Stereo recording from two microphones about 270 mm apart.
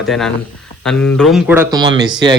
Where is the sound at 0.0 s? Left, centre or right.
Centre.